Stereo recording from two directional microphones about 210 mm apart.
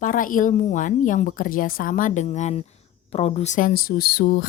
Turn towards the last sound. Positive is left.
turn(degrees=45)  # may be behind; listen again after turning